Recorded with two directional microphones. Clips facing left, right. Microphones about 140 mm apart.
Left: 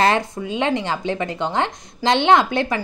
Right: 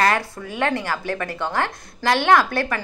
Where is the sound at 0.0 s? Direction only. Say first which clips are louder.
Left 2 dB; 25° left (ahead or behind).